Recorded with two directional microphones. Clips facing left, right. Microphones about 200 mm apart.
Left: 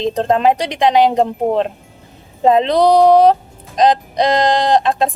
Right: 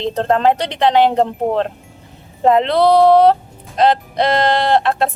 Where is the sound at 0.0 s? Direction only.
15° left (ahead or behind).